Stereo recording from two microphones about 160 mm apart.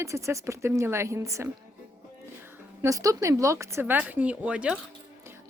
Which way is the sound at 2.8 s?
20° right (ahead or behind).